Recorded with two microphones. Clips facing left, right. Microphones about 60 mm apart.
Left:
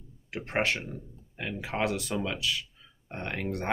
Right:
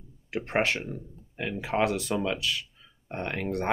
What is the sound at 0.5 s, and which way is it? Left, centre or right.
Speech, centre.